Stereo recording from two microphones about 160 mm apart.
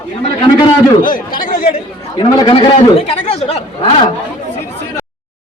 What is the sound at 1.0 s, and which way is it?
Speech, 60° left (ahead or behind).